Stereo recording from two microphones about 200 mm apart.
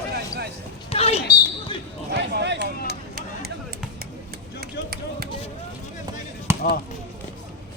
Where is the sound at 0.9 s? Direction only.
30° left (ahead or behind).